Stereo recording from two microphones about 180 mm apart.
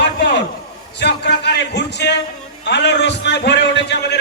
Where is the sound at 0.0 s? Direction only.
75° left (ahead or behind).